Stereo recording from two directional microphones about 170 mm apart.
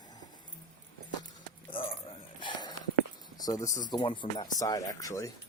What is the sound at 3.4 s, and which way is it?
Speech, 20° left (ahead or behind).